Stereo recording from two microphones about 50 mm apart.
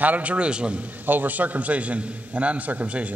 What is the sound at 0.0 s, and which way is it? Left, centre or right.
Speech, right.